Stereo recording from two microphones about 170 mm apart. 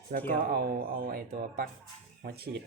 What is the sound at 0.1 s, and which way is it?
Speech, 55° right (ahead or behind).